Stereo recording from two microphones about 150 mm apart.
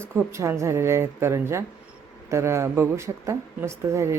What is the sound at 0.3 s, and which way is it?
Speech, 20° right (ahead or behind).